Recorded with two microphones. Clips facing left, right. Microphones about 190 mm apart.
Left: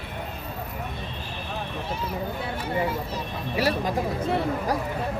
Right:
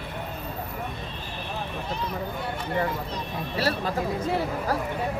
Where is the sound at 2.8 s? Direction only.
10° left (ahead or behind).